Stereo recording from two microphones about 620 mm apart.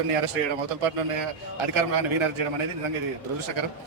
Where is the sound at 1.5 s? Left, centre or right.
Right.